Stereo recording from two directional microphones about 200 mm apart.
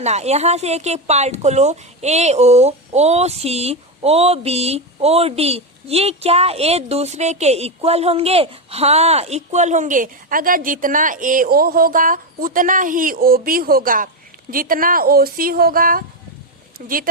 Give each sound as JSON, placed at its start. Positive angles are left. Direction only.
{"t": 0.0, "sound": "speech", "side_deg": -35}